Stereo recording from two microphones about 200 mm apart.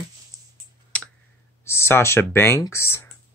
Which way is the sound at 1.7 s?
15° left (ahead or behind).